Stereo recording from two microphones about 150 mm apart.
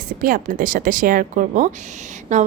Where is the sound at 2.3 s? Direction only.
50° right (ahead or behind).